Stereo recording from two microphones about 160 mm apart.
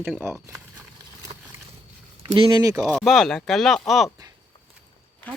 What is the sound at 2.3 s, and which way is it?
Speech, 30° right (ahead or behind).